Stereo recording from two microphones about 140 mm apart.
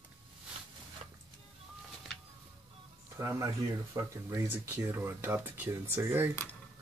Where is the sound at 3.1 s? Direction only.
20° right (ahead or behind).